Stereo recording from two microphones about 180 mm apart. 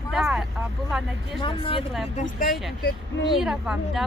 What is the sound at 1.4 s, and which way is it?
Speech, 30° left (ahead or behind).